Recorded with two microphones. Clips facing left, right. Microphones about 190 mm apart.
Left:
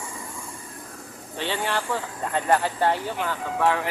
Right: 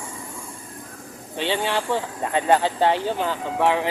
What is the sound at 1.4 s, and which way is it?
Speech, 20° right (ahead or behind).